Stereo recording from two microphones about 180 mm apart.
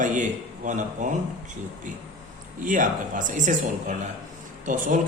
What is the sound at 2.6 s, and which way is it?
A man's voice, 45° right (ahead or behind).